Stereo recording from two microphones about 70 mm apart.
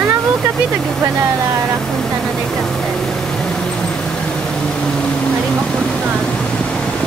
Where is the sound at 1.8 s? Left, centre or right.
Centre.